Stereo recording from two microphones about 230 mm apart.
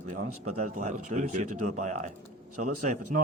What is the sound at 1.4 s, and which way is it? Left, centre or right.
Speech, right.